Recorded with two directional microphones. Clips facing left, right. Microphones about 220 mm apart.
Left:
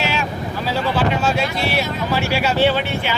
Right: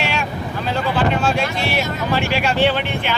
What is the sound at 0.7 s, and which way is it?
Speech, 5° left (ahead or behind).